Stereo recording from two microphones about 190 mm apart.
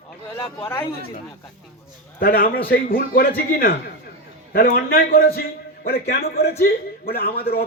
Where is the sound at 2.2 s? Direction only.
50° left (ahead or behind).